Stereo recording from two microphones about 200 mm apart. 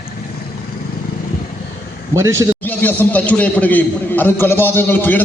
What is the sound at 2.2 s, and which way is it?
Speech, 15° right (ahead or behind).